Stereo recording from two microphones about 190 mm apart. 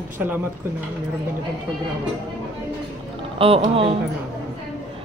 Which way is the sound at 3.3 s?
30° right (ahead or behind).